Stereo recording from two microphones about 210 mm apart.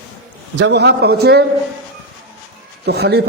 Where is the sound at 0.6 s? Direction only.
50° right (ahead or behind).